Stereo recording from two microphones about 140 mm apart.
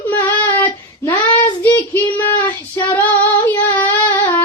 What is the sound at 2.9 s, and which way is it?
Female singing, 15° left (ahead or behind).